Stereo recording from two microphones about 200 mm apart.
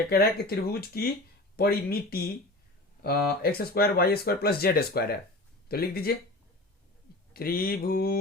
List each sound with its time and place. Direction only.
0.1 s speech: 50° left (ahead or behind)
7.3 s speech: 45° left (ahead or behind)